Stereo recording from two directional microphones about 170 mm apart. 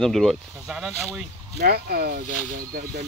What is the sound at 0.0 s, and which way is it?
Speech, centre (ahead or behind).